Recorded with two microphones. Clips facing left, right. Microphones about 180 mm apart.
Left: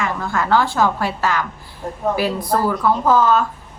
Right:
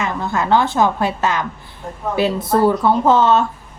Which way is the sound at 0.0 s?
20° right (ahead or behind).